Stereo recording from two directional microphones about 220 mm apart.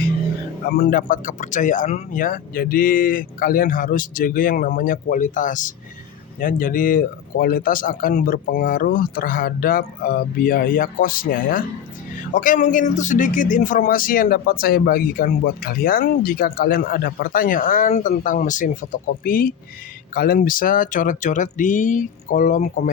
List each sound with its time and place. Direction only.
0.7 s speech: 40° left (ahead or behind)